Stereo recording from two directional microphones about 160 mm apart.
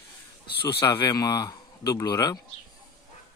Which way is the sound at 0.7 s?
25° left (ahead or behind).